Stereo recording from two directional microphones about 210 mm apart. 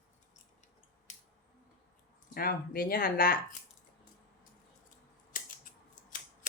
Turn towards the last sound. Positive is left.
turn(degrees=40)  # may be behind; listen again after turning